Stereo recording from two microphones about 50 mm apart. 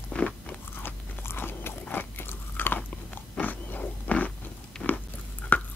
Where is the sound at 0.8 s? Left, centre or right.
Left.